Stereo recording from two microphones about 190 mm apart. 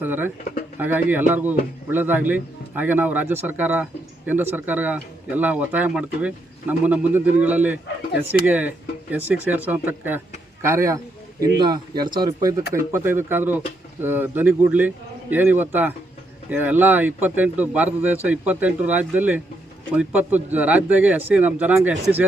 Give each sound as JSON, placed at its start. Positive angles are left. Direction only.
{"t": 0.0, "sound": "speech", "side_deg": -10}